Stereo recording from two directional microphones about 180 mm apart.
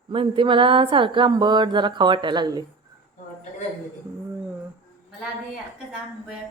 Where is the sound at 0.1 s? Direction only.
30° right (ahead or behind).